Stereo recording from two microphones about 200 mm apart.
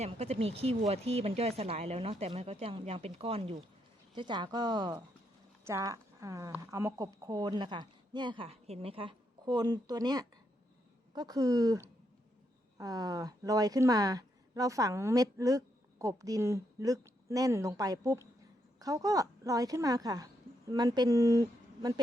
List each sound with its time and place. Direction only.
0.0 s a woman's voice: 30° right (ahead or behind)